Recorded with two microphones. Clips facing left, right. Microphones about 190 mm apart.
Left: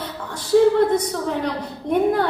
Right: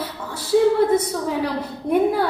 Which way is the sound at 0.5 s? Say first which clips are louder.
Left 2 dB; 5° right (ahead or behind).